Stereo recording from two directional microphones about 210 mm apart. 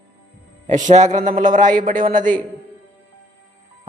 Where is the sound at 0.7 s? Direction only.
35° right (ahead or behind).